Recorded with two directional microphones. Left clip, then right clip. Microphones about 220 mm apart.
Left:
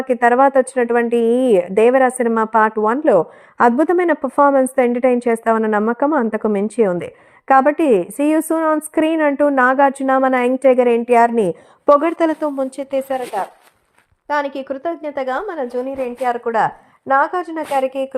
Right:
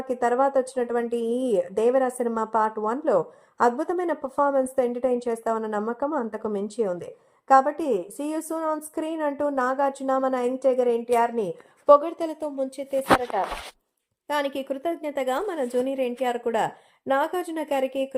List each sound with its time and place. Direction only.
0.1 s a woman's voice: 30° left (ahead or behind)
1.0 s speech: 55° left (ahead or behind)
1.3 s a woman's voice: 30° left (ahead or behind)
14.3 s a woman's voice: 10° left (ahead or behind)